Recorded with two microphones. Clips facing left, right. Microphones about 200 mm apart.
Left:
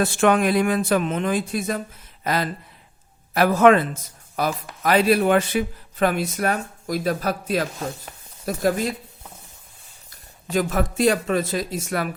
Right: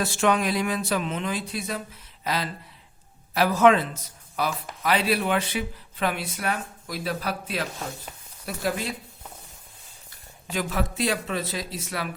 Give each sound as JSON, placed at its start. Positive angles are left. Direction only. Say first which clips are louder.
{"t": 0.0, "sound": "speech", "louder": "left 5 dB", "side_deg": 55}
{"t": 10.5, "sound": "speech", "louder": "left 6 dB", "side_deg": 45}